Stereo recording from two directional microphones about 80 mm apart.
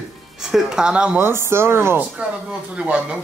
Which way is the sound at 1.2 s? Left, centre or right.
Right.